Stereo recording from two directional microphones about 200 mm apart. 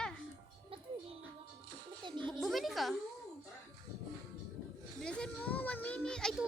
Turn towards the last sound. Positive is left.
turn(degrees=5)  # may be behind; listen again after turning